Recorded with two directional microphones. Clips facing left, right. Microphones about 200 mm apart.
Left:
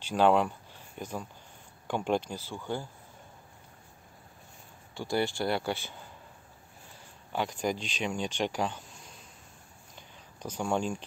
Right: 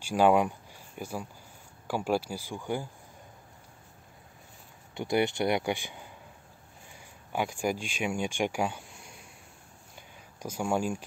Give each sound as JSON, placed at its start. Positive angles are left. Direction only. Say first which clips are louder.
{"t": 0.0, "sound": "speech", "louder": "right 1 dB", "side_deg": -10}
{"t": 4.9, "sound": "speech", "louder": "right 3 dB", "side_deg": -20}
{"t": 9.9, "sound": "a sound", "louder": "right 1 dB", "side_deg": -10}